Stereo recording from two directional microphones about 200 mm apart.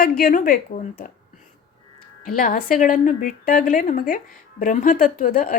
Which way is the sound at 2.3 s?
40° left (ahead or behind).